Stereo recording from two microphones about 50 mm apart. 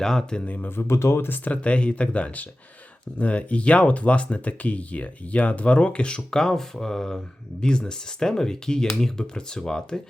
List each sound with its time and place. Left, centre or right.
0.0 s speech: centre
0.4 s speech: left
0.9 s speech: left
1.5 s speech: left